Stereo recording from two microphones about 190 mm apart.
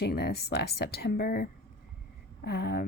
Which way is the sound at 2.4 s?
60° left (ahead or behind).